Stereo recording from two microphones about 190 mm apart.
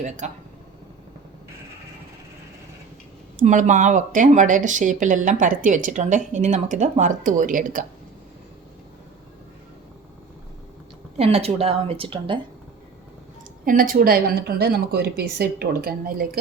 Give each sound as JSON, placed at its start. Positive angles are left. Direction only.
{"t": 0.0, "sound": "speech", "side_deg": -40}
{"t": 3.3, "sound": "speech", "side_deg": -40}
{"t": 11.2, "sound": "speech", "side_deg": -35}
{"t": 13.7, "sound": "a woman's voice", "side_deg": -45}